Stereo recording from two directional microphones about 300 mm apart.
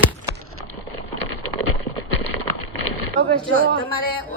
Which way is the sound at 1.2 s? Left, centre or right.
Right.